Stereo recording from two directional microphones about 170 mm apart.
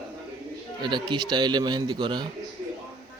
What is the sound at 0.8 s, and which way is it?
A man's voice, 25° right (ahead or behind).